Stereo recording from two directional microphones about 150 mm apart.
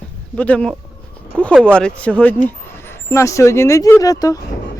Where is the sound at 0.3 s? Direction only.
10° left (ahead or behind).